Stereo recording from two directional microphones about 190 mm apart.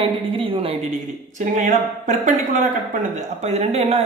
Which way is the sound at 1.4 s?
40° right (ahead or behind).